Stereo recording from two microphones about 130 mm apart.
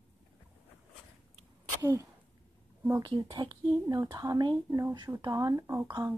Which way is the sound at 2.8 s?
25° right (ahead or behind).